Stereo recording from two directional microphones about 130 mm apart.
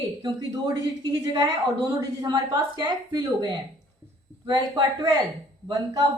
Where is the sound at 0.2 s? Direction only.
35° right (ahead or behind).